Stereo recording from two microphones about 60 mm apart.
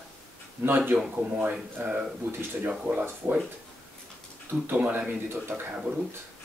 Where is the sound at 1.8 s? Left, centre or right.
Right.